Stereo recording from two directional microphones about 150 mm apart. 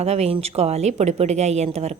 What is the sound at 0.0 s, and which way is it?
A woman's voice, 45° right (ahead or behind).